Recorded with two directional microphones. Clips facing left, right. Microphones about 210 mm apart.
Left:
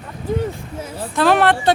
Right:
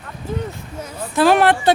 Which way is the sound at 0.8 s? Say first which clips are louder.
Left 2 dB; 25° left (ahead or behind).